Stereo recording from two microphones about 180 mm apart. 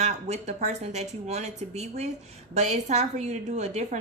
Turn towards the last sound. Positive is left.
turn(degrees=-40)  # may be behind; listen again after turning